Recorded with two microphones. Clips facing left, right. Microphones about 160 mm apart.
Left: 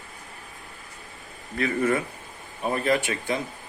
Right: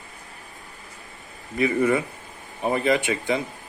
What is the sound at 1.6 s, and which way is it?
Speech, 15° right (ahead or behind).